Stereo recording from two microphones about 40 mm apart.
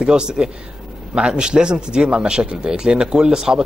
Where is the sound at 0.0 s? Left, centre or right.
Right.